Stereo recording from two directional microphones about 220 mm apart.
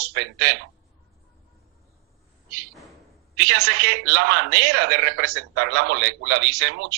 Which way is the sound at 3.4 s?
50° right (ahead or behind).